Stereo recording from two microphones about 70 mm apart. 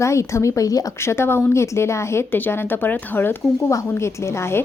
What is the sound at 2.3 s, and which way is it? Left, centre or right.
Speech, left.